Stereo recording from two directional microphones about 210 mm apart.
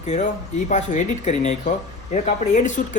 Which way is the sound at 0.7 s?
35° left (ahead or behind).